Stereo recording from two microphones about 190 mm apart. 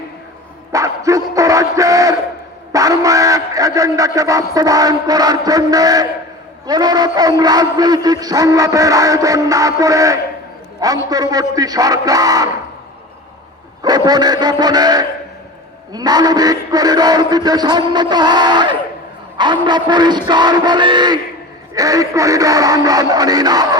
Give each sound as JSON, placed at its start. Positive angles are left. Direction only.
{"t": 0.7, "sound": "dog", "side_deg": -15}
{"t": 2.7, "sound": "a man's voice", "side_deg": -20}
{"t": 13.8, "sound": "a man's voice", "side_deg": -20}